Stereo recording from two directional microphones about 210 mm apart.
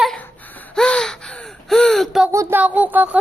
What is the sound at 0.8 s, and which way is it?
Gasp, 5° left (ahead or behind).